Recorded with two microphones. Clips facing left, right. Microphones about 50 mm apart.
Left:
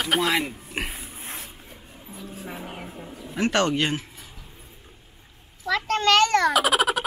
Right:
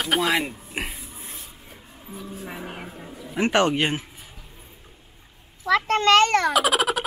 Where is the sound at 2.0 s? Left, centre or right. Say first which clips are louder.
Right 2 dB; centre.